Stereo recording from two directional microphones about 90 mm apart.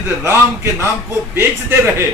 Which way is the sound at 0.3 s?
30° right (ahead or behind).